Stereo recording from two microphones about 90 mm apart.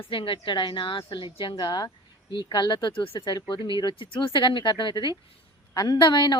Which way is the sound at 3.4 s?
60° left (ahead or behind).